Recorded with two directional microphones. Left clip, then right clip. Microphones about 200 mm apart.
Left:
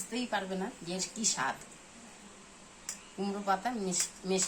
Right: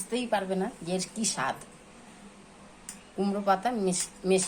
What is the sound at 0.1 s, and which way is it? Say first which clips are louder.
Speech: right 6 dB; 40° right (ahead or behind).